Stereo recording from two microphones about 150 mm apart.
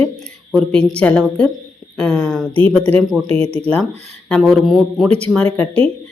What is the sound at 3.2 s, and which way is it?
Speech, 40° right (ahead or behind).